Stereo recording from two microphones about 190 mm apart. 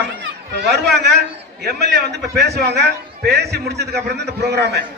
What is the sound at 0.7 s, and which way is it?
A man's voice, 60° right (ahead or behind).